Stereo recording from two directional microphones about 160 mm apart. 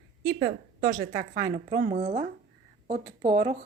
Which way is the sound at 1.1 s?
35° right (ahead or behind).